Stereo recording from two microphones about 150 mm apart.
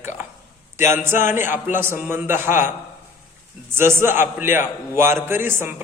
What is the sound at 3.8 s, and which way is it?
A man's voice, 15° right (ahead or behind).